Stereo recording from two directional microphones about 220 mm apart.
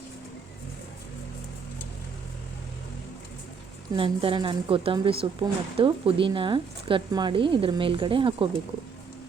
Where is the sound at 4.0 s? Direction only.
25° right (ahead or behind).